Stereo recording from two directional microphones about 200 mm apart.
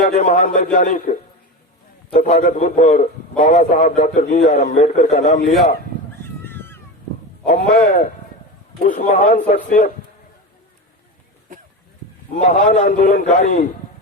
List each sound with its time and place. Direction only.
0.0 s a man's voice: 40° left (ahead or behind)
2.1 s a man's voice: 40° left (ahead or behind)
6.4 s a sound: 10° left (ahead or behind)
7.4 s a man's voice: 40° left (ahead or behind)
12.3 s a man's voice: 40° left (ahead or behind)